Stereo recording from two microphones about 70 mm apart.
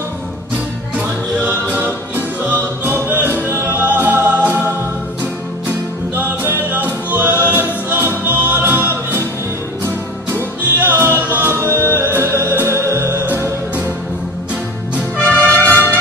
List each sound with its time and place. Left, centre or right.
1.4 s music: right
6.1 s music: right
10.3 s music: right
13.2 s music: right
15.2 s music: left